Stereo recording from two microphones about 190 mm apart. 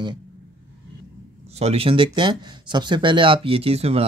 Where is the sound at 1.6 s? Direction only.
30° right (ahead or behind).